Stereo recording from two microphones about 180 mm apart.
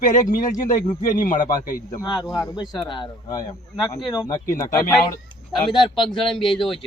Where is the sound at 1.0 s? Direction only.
50° left (ahead or behind).